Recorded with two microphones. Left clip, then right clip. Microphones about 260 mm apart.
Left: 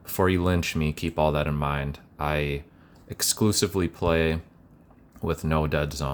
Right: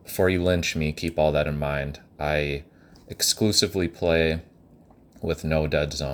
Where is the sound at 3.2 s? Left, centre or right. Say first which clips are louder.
Right 3 dB; left.